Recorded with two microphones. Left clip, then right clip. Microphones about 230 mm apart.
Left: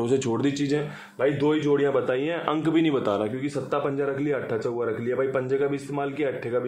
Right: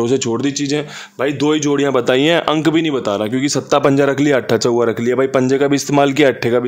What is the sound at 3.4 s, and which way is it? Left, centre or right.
A man's voice, right.